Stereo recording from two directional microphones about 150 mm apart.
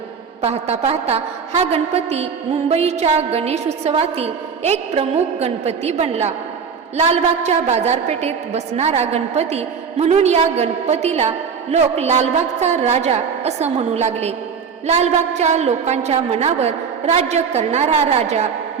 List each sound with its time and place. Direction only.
0.4 s a woman's voice: 45° right (ahead or behind)